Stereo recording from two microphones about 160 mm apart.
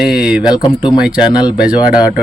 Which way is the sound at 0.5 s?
25° left (ahead or behind).